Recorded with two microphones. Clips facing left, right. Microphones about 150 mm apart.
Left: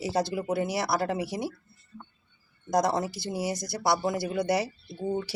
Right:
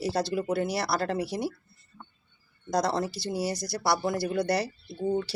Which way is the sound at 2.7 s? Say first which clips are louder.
Left 1 dB; 15° left (ahead or behind).